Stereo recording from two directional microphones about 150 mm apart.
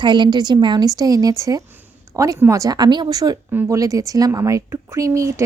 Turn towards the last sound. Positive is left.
turn(degrees=-20)  # may be behind; listen again after turning